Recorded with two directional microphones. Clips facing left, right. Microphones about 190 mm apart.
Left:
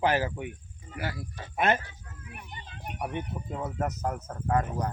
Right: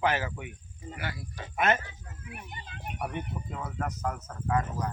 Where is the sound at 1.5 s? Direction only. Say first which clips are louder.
Left 1 dB; 35° left (ahead or behind).